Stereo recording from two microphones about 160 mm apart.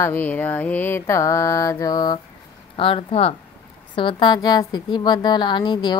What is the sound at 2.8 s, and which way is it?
Speech, 35° left (ahead or behind).